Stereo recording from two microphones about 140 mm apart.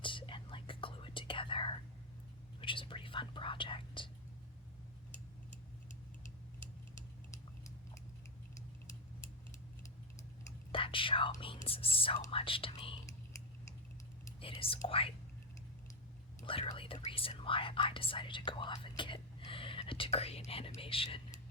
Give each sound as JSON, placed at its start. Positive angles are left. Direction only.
{"t": 0.0, "sound": "whispering", "side_deg": 35}
{"t": 10.7, "sound": "whispering", "side_deg": 40}
{"t": 14.4, "sound": "whispering", "side_deg": 40}
{"t": 14.8, "sound": "speech", "side_deg": 40}
{"t": 16.7, "sound": "speech", "side_deg": 40}